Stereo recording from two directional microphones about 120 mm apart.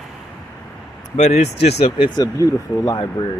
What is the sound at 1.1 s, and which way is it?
Speech, 65° left (ahead or behind).